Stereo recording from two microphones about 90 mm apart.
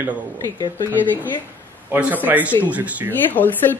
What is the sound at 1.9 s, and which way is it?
Speech, 20° right (ahead or behind).